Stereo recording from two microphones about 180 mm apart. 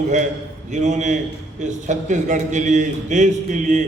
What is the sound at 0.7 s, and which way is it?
A man's voice, 40° right (ahead or behind).